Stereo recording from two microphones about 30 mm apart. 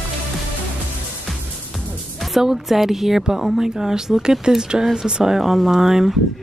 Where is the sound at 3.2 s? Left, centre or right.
Centre.